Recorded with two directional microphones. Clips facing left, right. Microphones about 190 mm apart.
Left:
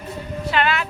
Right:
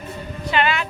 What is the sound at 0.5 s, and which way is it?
Speech, centre (ahead or behind).